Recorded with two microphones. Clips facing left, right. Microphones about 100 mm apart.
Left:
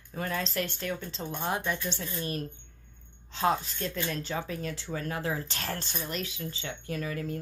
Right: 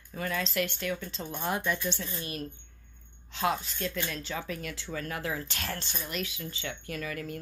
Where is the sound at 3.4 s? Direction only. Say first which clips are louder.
Left 2 dB; 30° left (ahead or behind).